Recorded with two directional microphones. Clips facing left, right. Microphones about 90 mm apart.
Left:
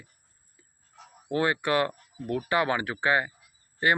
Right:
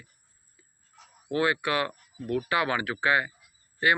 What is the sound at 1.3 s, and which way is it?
A man's voice, 30° left (ahead or behind).